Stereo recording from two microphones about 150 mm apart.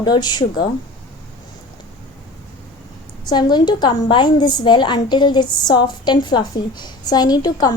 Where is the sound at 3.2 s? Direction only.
30° left (ahead or behind).